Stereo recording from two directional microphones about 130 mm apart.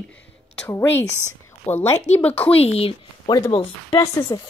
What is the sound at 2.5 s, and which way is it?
Speech, 50° left (ahead or behind).